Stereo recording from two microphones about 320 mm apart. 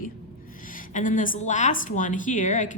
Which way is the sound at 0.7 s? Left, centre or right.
Left.